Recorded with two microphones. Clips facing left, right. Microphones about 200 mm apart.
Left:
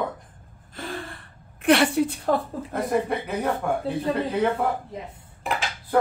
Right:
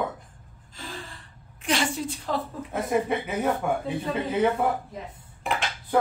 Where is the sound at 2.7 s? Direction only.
Centre (ahead or behind).